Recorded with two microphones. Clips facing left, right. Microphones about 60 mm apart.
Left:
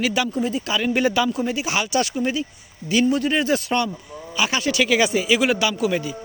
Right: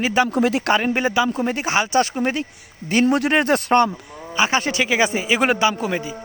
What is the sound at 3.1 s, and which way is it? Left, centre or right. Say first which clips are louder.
Speech: right 3 dB; right.